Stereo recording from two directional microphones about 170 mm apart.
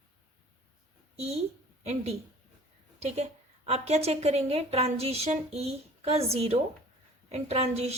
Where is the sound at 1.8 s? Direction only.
40° right (ahead or behind).